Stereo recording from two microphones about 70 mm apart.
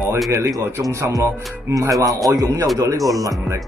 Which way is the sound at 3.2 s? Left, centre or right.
Right.